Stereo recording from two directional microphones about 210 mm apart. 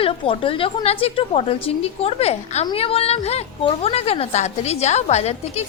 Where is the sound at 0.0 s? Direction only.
25° left (ahead or behind).